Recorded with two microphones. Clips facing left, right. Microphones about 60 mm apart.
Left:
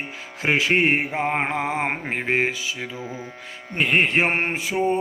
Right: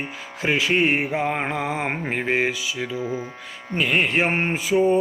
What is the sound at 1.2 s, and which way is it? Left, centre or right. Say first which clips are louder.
Speech: left 1 dB; left.